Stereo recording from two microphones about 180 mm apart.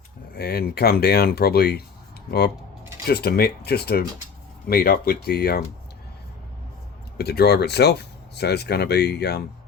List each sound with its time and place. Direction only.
0.3 s speech: 65° left (ahead or behind)
3.1 s speech: 60° left (ahead or behind)
7.2 s speech: 65° left (ahead or behind)